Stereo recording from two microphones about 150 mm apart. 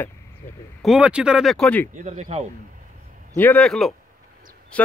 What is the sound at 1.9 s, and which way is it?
Speech, 55° right (ahead or behind).